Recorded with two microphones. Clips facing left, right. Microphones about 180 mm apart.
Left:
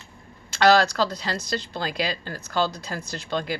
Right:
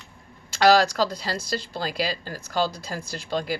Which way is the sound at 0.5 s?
10° right (ahead or behind).